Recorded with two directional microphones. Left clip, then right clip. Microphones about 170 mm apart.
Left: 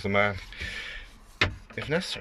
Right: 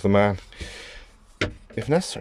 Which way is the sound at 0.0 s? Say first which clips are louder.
Right 5 dB; 35° right (ahead or behind).